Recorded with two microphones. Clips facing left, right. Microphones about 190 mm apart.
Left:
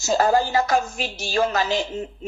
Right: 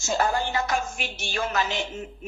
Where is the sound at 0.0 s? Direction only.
35° left (ahead or behind).